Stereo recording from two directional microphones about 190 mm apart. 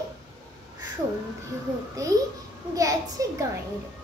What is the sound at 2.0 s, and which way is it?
Child singing, 15° right (ahead or behind).